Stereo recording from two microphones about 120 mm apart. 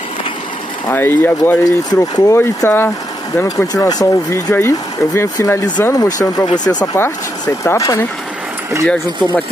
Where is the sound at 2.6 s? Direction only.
20° left (ahead or behind).